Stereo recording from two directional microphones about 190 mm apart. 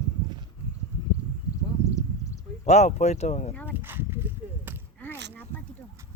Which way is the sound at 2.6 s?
35° left (ahead or behind).